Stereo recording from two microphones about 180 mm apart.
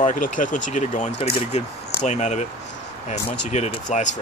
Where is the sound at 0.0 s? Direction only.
45° left (ahead or behind).